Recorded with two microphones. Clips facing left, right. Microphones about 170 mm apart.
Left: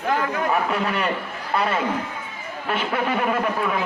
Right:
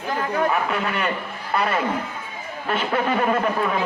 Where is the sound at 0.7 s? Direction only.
35° left (ahead or behind).